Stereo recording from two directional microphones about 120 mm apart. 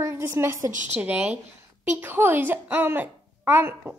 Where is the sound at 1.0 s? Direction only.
15° right (ahead or behind).